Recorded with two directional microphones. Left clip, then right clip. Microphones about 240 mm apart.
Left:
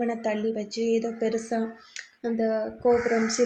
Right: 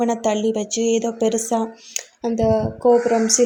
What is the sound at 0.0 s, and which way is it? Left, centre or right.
Speech, right.